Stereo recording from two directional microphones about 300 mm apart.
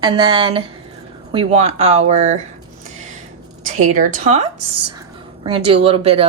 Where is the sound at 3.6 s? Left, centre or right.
Right.